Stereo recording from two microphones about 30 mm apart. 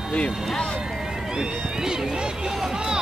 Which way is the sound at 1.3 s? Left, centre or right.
Right.